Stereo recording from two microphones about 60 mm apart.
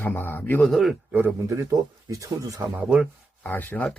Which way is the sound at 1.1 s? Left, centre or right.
Right.